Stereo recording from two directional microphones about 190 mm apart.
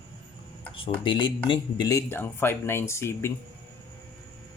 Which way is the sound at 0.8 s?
25° left (ahead or behind).